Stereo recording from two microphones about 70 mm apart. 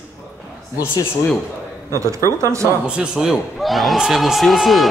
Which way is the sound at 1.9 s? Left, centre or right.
Right.